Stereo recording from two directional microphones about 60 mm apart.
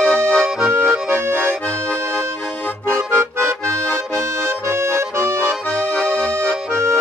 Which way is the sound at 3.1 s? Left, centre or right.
Right.